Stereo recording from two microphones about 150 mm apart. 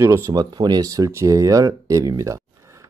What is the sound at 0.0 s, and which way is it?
Speech, 20° right (ahead or behind).